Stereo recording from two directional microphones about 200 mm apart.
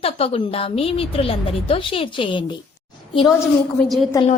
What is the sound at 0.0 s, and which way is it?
A woman's voice, 30° left (ahead or behind).